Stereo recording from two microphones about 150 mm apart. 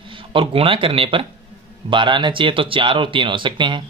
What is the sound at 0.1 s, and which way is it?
Speech, 35° right (ahead or behind).